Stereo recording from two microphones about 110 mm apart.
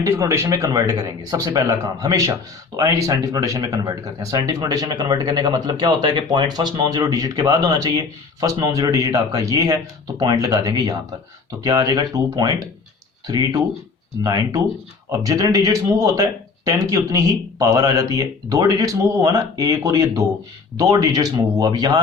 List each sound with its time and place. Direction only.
0.0 s speech: 30° right (ahead or behind)